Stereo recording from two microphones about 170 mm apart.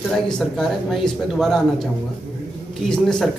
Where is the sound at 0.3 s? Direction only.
Centre (ahead or behind).